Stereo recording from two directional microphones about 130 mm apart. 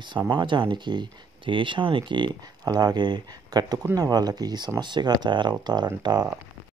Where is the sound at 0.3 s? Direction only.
35° right (ahead or behind).